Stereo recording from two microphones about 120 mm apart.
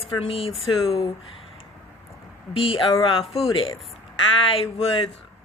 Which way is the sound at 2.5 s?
50° left (ahead or behind).